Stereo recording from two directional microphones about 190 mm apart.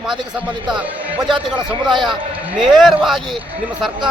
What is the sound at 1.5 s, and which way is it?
Speech, 25° right (ahead or behind).